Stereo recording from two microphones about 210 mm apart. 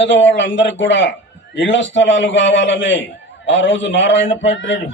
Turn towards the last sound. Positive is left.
turn(degrees=60)  # may be behind; listen again after turning